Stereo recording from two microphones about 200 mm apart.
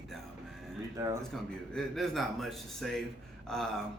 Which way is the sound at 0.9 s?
15° right (ahead or behind).